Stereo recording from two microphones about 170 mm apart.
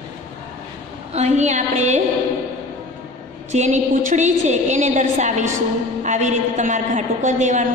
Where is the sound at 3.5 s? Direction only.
45° right (ahead or behind).